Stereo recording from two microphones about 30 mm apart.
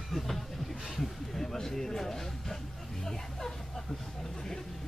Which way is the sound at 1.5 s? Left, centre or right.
Centre.